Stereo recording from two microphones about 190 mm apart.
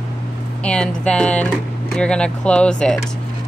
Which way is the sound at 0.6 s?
5° left (ahead or behind).